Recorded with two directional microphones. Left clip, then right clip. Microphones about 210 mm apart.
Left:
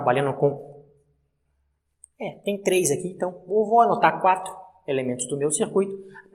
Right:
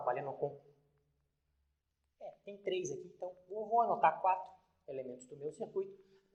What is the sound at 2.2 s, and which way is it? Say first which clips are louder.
Speech: left 18 dB; 45° left (ahead or behind).